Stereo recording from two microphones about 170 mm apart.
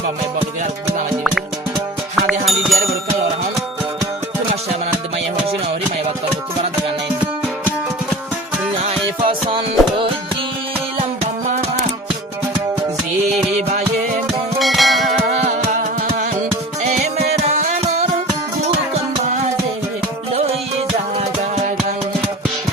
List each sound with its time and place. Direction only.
2.5 s music: centre (ahead or behind)
9.2 s music: 30° right (ahead or behind)
13.6 s music: 40° right (ahead or behind)
14.6 s music: centre (ahead or behind)
15.2 s music: 45° right (ahead or behind)
21.2 s music: 40° right (ahead or behind)